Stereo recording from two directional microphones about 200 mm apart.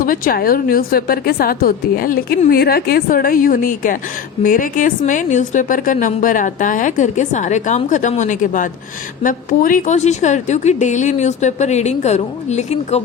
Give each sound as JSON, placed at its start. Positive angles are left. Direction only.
{"t": 0.0, "sound": "a woman's voice", "side_deg": 45}